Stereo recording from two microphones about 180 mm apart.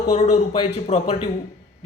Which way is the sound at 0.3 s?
30° left (ahead or behind).